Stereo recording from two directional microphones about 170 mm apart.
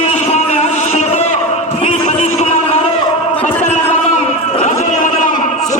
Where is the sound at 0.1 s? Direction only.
40° left (ahead or behind).